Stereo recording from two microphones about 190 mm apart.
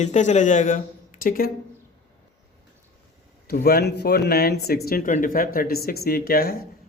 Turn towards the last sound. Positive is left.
turn(degrees=50)  # may be behind; listen again after turning